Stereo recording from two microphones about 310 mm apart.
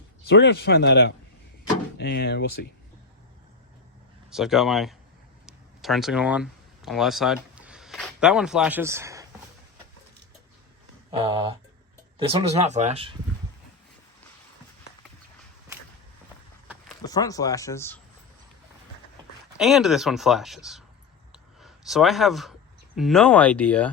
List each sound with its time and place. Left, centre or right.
0.3 s speech: left
4.3 s speech: centre
5.5 s a sound: centre
12.2 s speech: centre
17.0 s speech: centre
19.5 s speech: centre
21.3 s a sound: centre
23.0 s speech: centre